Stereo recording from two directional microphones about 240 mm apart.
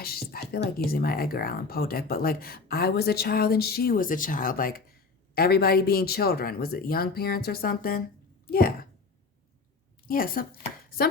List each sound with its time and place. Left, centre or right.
0.0 s music: left
0.9 s a child's voice: left
10.1 s speech: left
10.8 s chopping: left